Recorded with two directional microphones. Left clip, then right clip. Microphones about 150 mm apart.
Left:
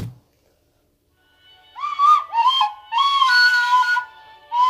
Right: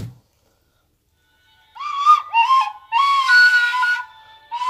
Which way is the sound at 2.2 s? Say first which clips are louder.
Right 2 dB; 20° left (ahead or behind).